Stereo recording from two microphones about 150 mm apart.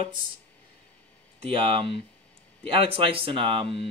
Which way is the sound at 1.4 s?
40° right (ahead or behind).